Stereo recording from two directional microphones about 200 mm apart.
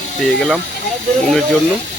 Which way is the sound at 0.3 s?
Centre (ahead or behind).